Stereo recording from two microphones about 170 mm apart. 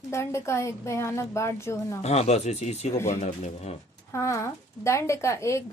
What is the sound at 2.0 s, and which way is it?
Speech, 40° left (ahead or behind).